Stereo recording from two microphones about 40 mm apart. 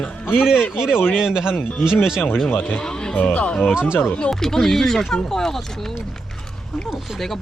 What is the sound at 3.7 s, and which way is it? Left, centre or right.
Speech, right.